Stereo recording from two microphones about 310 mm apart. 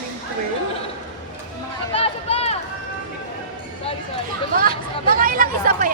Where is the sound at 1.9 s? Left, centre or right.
Centre.